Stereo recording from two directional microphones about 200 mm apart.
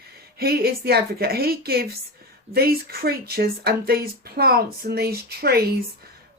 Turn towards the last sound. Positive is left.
turn(degrees=-50)  # may be behind; listen again after turning